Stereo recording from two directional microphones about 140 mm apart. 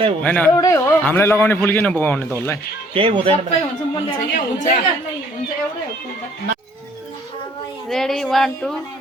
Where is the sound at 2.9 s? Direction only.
40° right (ahead or behind).